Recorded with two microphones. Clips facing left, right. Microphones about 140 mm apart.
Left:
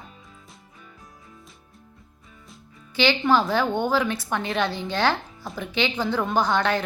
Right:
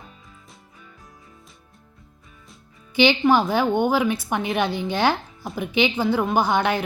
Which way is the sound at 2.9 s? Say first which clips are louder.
Right 3 dB; 15° right (ahead or behind).